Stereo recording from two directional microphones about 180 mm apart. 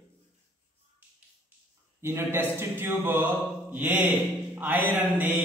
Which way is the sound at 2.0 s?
15° right (ahead or behind).